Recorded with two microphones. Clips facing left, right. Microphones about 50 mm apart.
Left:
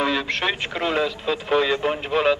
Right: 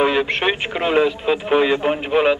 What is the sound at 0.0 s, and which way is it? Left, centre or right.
A man's voice, right.